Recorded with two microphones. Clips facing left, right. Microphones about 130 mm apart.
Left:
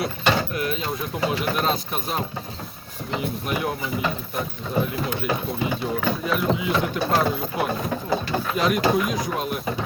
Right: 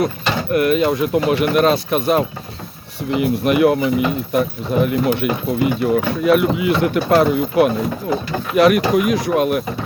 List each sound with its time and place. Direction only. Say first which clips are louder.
0.5 s speech: right 11 dB; 65° right (ahead or behind)